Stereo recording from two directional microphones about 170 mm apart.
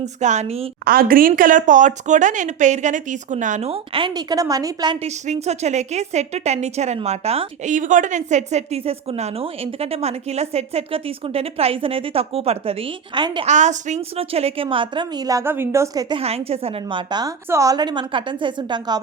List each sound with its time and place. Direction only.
0.2 s a woman's voice: 45° right (ahead or behind)
0.9 s speech: 60° right (ahead or behind); by 4.9 s 25° right (ahead or behind)
5.0 s a woman's voice: 40° right (ahead or behind); by 13.4 s 25° right (ahead or behind)
13.4 s a woman's voice: 45° right (ahead or behind)
15.3 s a woman's voice: 15° right (ahead or behind)
16.2 s a woman's voice: 35° right (ahead or behind)